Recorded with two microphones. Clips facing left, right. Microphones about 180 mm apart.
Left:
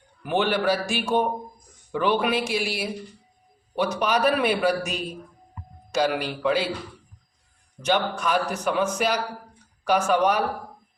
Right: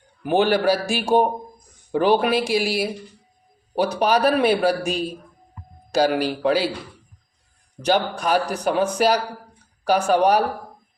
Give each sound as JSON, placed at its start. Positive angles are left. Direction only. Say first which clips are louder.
{"t": 0.3, "sound": "a man's voice", "louder": "right 5 dB", "side_deg": -40}
{"t": 7.8, "sound": "a man's voice", "louder": "right 3 dB", "side_deg": -35}